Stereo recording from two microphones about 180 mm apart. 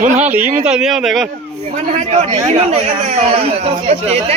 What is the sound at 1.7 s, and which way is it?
Speech, 40° right (ahead or behind).